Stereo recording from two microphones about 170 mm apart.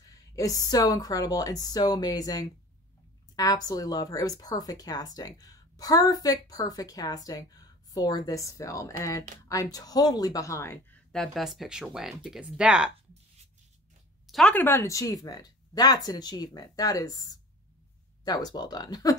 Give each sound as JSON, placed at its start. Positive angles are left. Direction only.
{"t": 0.4, "sound": "a woman's voice", "side_deg": 20}
{"t": 11.1, "sound": "speech", "side_deg": 0}
{"t": 14.2, "sound": "a woman's voice", "side_deg": 5}